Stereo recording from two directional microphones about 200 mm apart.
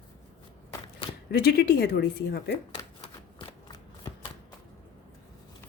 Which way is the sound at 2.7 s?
30° left (ahead or behind).